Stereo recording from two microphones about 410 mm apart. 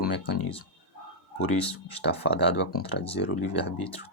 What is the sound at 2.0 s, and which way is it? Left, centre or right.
Speech, left.